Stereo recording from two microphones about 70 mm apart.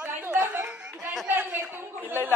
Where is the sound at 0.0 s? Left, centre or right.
Right.